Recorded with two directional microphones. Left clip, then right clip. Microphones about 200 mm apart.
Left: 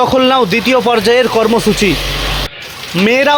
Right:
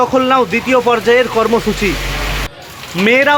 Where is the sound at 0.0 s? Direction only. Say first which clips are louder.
Left 2 dB; 20° left (ahead or behind).